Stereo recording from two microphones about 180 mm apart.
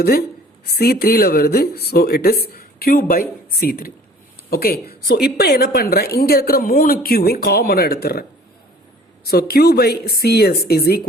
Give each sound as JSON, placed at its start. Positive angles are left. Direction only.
{"t": 0.0, "sound": "speech", "side_deg": 60}
{"t": 9.2, "sound": "speech", "side_deg": 60}